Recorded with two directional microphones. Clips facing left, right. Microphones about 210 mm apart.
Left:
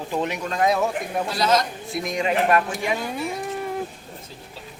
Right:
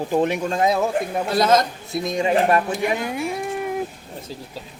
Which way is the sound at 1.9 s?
25° right (ahead or behind).